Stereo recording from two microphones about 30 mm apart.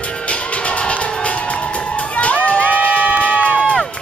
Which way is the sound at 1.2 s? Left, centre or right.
Left.